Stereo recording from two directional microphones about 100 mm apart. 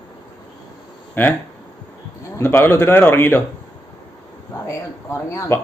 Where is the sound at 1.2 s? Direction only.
20° left (ahead or behind).